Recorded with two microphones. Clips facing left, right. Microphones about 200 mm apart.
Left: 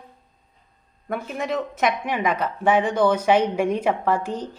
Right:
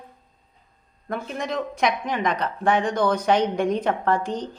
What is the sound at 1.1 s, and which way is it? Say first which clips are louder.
Speech: left 2 dB; 5° left (ahead or behind).